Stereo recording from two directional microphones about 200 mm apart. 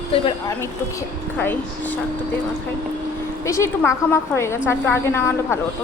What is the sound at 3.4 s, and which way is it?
A woman's voice, 15° left (ahead or behind).